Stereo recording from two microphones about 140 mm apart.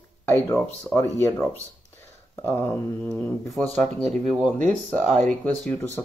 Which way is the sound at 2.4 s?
15° left (ahead or behind).